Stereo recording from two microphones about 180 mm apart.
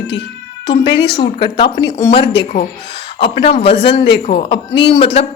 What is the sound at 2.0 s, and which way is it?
Speech, 15° left (ahead or behind).